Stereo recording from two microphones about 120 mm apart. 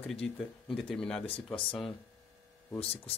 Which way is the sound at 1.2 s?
50° left (ahead or behind).